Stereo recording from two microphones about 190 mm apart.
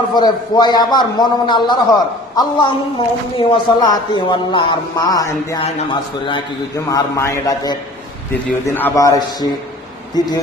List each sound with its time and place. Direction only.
0.1 s a man's voice: 20° left (ahead or behind)